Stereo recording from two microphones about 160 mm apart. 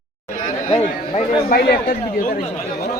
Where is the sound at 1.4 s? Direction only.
70° left (ahead or behind).